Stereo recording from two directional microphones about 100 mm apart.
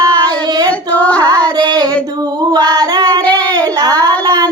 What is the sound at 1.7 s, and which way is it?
Child singing, 45° right (ahead or behind).